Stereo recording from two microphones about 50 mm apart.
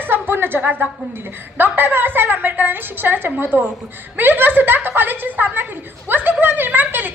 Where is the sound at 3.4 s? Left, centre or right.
Right.